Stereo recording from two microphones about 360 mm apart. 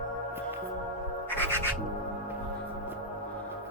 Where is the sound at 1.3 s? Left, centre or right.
Centre.